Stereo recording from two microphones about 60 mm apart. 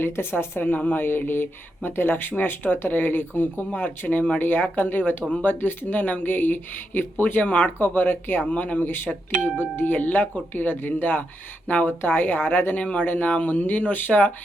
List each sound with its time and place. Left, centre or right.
0.0 s speech: left
0.7 s speech: left
1.0 s speech: left
9.1 s speech: centre
9.6 s speech: left
12.8 s speech: left